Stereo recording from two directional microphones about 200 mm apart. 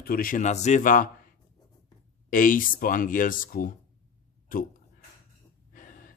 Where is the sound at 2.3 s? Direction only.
45° left (ahead or behind).